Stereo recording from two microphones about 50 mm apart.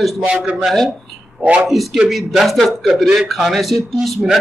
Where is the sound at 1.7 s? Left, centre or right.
Centre.